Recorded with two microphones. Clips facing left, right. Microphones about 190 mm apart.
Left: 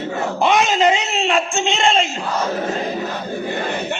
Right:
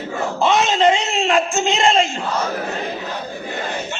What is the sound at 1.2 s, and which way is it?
Speech, centre (ahead or behind).